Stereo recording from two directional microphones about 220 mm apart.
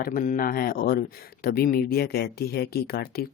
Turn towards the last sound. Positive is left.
turn(degrees=45)  # may be behind; listen again after turning